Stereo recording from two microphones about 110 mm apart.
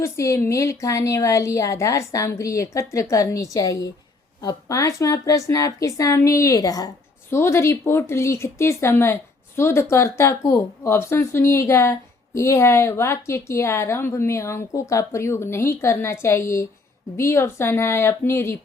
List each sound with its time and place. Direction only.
0.0 s a woman's voice: 25° left (ahead or behind)